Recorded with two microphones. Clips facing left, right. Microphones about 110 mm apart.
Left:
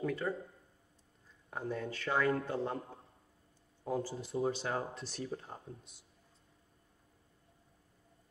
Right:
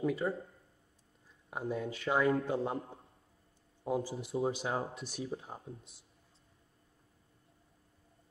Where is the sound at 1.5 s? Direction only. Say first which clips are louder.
Right 2 dB; 10° right (ahead or behind).